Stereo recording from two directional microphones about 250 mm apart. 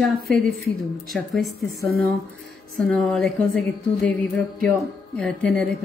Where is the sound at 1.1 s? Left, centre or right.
Centre.